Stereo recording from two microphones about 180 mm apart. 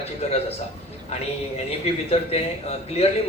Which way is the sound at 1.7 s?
35° left (ahead or behind).